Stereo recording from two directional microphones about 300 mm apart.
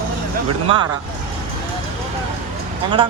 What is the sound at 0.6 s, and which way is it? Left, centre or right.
Speech, centre.